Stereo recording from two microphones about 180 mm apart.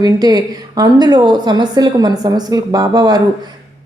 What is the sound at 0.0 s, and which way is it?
Speech, 20° right (ahead or behind).